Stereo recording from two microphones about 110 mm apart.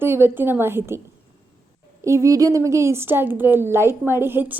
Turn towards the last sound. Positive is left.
turn(degrees=-20)  # may be behind; listen again after turning